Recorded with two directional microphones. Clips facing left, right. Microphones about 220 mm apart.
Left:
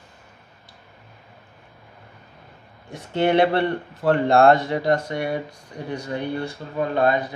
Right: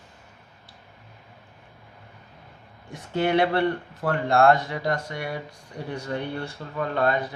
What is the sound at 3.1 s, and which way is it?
Speech, 25° left (ahead or behind).